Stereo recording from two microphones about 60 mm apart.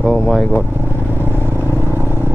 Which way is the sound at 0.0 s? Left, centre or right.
Centre.